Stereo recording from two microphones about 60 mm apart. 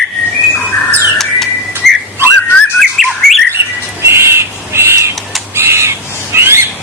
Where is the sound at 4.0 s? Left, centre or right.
Right.